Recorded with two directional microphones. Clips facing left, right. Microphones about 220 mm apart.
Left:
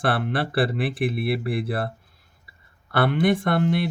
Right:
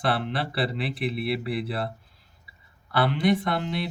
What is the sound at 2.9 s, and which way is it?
Speech, 55° left (ahead or behind).